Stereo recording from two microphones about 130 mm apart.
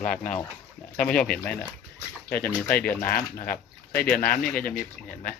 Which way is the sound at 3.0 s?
90° left.